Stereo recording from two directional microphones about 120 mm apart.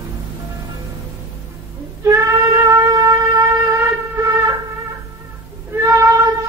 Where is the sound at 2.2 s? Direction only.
25° right (ahead or behind).